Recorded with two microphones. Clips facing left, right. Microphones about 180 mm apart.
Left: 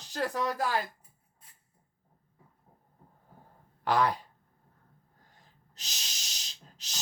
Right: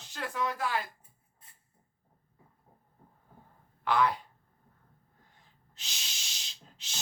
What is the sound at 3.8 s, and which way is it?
Speech, 40° left (ahead or behind).